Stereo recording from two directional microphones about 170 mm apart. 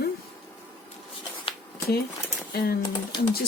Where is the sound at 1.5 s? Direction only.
30° left (ahead or behind).